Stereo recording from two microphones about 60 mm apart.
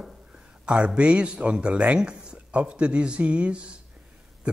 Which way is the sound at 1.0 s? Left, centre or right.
Centre.